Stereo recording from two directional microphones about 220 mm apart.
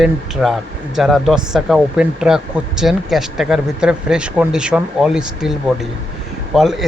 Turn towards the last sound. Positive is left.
turn(degrees=0)  # may be behind; listen again after turning